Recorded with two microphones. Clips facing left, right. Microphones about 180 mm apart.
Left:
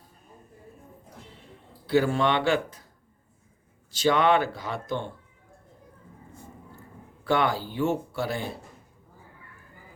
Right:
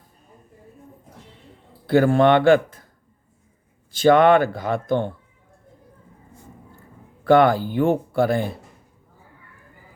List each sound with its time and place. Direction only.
1.9 s speech: 55° right (ahead or behind)
3.9 s speech: 55° right (ahead or behind)
7.3 s speech: 55° right (ahead or behind)